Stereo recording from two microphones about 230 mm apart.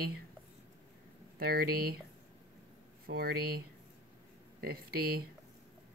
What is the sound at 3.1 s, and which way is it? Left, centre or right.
Speech, right.